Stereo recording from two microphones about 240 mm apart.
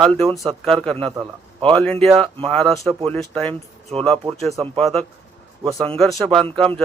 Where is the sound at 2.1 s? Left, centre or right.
Right.